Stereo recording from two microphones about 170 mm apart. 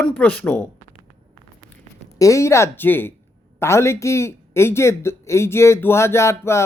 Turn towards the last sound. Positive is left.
turn(degrees=15)  # may be behind; listen again after turning